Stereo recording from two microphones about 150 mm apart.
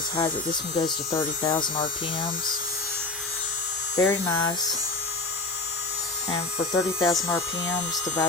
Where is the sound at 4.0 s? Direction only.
20° left (ahead or behind).